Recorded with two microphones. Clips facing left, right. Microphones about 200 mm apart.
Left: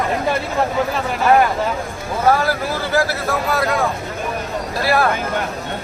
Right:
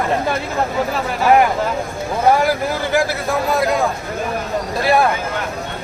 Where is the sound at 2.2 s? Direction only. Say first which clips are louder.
Right 2 dB; 15° right (ahead or behind).